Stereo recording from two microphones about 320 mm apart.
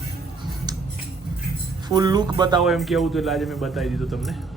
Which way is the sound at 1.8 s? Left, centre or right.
Centre.